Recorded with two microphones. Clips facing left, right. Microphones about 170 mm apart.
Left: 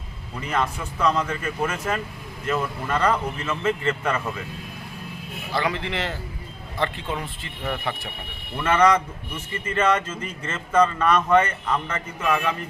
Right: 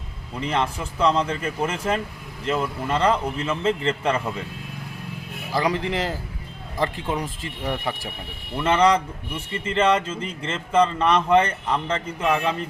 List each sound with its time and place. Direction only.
0.3 s speech: 25° right (ahead or behind)
5.5 s a man's voice: 40° right (ahead or behind)
7.2 s speech: 15° right (ahead or behind)
8.6 s speech: 30° right (ahead or behind)